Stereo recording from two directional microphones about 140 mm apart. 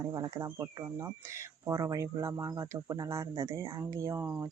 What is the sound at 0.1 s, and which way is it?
Speech, 25° right (ahead or behind).